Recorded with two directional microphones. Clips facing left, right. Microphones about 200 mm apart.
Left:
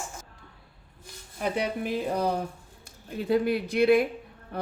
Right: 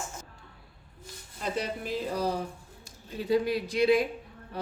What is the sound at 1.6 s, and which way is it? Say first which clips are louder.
A woman's voice: left 3 dB; 55° left (ahead or behind).